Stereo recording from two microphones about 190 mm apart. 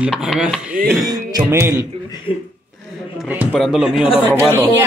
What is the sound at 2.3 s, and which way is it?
Speech, 25° left (ahead or behind).